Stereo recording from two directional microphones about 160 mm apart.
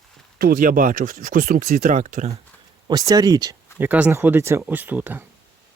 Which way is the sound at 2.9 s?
25° right (ahead or behind).